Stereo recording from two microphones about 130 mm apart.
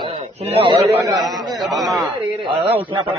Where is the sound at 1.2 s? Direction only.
Centre (ahead or behind).